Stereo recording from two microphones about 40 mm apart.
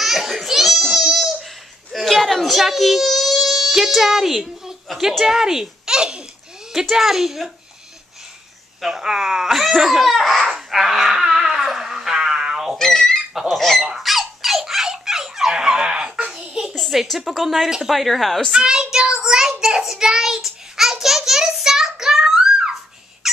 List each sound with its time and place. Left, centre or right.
0.0 s babbling: centre
5.2 s a child's voice: centre
6.7 s speech: centre
8.8 s speech: centre
10.7 s a sound: centre
12.7 s fowl: centre
13.5 s goose: centre
13.8 s squawk: centre
16.6 s a sound: centre
17.2 s speech: centre
18.7 s speech: centre
19.6 s child singing: centre
23.2 s squeak: centre